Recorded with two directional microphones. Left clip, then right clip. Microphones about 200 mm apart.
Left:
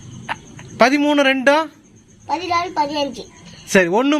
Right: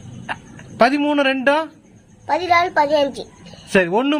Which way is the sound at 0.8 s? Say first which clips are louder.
Left 1 dB; 5° left (ahead or behind).